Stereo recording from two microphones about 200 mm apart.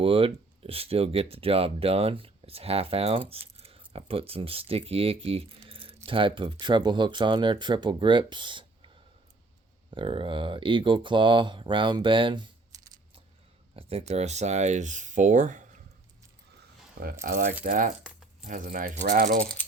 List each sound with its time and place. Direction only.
0.0 s speech: 25° right (ahead or behind)
9.9 s speech: 25° right (ahead or behind)
13.7 s speech: 30° right (ahead or behind)
17.0 s speech: 50° right (ahead or behind)